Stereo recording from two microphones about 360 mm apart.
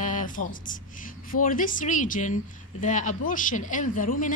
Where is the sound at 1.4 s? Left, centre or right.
Left.